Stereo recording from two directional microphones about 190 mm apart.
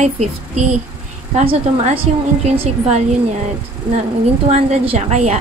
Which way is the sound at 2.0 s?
30° right (ahead or behind).